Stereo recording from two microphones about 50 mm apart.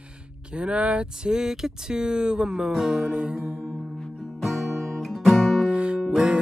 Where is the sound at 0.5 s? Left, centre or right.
Right.